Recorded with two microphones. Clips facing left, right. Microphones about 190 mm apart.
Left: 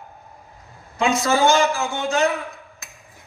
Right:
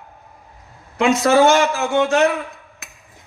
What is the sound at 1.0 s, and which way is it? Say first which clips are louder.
A man's voice: right 5 dB; 70° right (ahead or behind).